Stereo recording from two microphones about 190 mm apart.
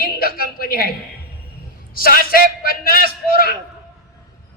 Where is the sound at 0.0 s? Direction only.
50° left (ahead or behind).